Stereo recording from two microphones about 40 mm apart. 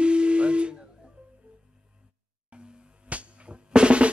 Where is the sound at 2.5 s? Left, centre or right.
Right.